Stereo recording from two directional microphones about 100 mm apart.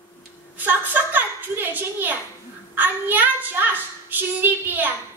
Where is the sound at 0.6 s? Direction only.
20° right (ahead or behind).